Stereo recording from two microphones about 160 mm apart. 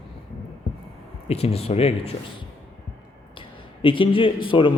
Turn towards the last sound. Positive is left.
turn(degrees=30)  # may be behind; listen again after turning